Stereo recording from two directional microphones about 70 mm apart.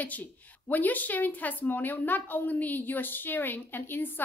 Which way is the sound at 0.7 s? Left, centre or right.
Left.